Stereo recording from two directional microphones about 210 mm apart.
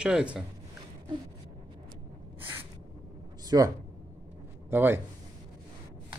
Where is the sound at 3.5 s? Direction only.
15° right (ahead or behind).